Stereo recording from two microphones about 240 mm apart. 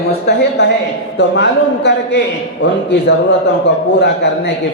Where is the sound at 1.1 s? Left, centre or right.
Left.